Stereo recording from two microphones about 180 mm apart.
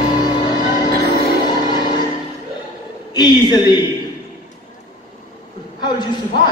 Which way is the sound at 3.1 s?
25° left (ahead or behind).